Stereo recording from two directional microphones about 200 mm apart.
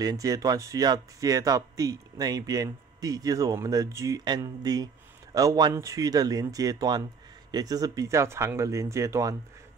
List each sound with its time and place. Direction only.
0.0 s speech: 20° right (ahead or behind)